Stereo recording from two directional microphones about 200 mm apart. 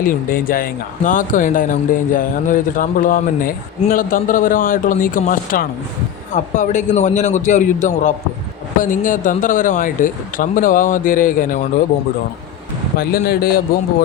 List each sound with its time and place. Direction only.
0.0 s a man's voice: 45° left (ahead or behind)
13.0 s speech: 50° left (ahead or behind)